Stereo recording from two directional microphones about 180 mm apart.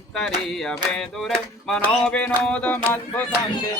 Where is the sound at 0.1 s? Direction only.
Centre (ahead or behind).